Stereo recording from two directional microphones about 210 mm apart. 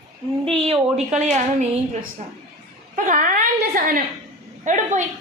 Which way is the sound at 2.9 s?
40° right (ahead or behind).